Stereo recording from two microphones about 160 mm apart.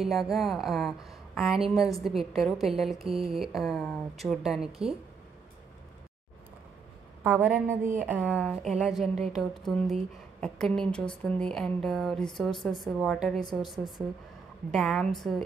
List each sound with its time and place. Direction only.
0.0 s a woman's voice: centre (ahead or behind)
7.3 s a woman's voice: 10° right (ahead or behind)
8.2 s a woman's voice: 10° left (ahead or behind)
8.5 s a woman's voice: 5° right (ahead or behind)
14.7 s a woman's voice: centre (ahead or behind)